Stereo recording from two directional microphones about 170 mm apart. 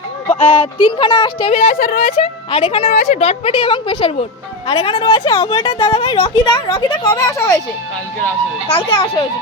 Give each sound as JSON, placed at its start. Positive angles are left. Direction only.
{"t": 0.3, "sound": "speech", "side_deg": 10}
{"t": 0.5, "sound": "speech", "side_deg": 30}
{"t": 2.0, "sound": "speech", "side_deg": 40}
{"t": 2.9, "sound": "speech", "side_deg": 50}
{"t": 8.7, "sound": "speech", "side_deg": 30}